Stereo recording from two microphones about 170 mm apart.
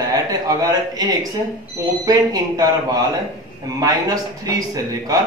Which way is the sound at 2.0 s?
20° right (ahead or behind).